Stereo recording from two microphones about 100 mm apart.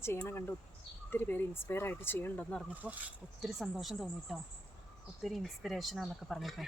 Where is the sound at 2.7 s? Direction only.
15° right (ahead or behind).